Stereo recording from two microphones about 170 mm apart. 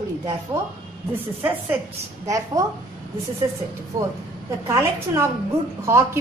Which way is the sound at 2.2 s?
20° right (ahead or behind).